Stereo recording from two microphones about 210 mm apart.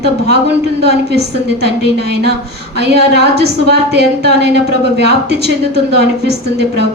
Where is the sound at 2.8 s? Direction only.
55° right (ahead or behind).